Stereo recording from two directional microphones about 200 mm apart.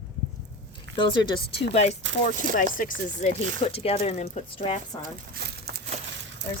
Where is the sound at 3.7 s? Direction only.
30° left (ahead or behind).